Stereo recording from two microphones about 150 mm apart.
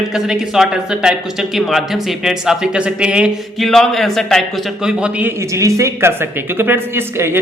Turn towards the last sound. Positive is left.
turn(degrees=-15)  # may be behind; listen again after turning